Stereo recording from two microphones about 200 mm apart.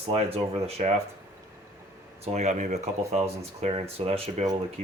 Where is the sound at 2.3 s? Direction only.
35° right (ahead or behind).